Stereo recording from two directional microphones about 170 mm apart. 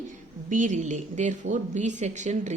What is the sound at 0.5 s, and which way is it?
A woman's voice, 45° right (ahead or behind).